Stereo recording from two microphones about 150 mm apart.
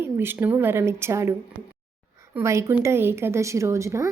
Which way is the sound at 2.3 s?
15° right (ahead or behind).